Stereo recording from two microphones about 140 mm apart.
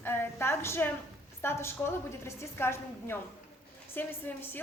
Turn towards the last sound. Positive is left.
turn(degrees=15)  # may be behind; listen again after turning